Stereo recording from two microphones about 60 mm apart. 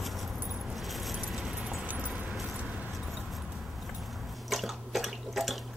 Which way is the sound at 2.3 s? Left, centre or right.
Centre.